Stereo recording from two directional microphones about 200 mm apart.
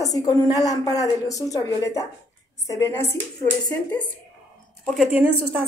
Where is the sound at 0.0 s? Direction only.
15° left (ahead or behind).